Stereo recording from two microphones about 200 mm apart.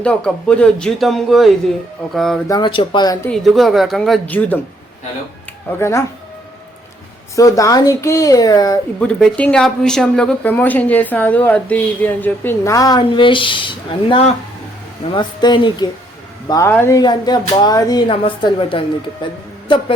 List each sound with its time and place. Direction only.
0.0 s speech: 5° left (ahead or behind)
2.5 s speech: 25° left (ahead or behind)
3.2 s speech: centre (ahead or behind)
7.3 s speech: 15° left (ahead or behind)
9.0 s speech: 5° left (ahead or behind); by 18.9 s 25° left (ahead or behind)